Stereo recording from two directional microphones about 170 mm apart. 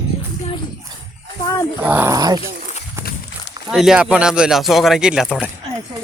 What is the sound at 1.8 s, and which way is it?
Speech, 10° right (ahead or behind).